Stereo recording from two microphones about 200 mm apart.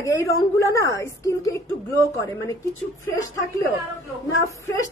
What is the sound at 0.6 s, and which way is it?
A woman's voice, 15° left (ahead or behind).